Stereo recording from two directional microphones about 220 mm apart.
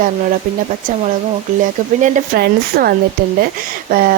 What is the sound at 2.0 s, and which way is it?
Speech, 35° right (ahead or behind).